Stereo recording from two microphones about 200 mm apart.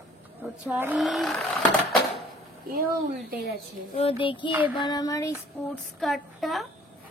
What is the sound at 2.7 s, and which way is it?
Speech, 45° right (ahead or behind).